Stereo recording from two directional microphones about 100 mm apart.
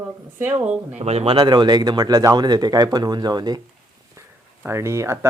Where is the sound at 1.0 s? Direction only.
90° right; by 3.6 s 45° right (ahead or behind).